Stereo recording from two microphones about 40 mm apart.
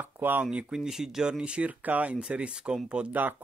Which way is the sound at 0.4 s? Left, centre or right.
Right.